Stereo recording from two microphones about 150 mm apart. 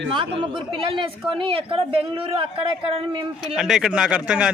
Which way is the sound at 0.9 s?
35° right (ahead or behind).